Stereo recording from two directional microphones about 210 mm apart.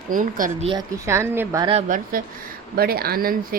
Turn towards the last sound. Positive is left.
turn(degrees=-45)  # may be behind; listen again after turning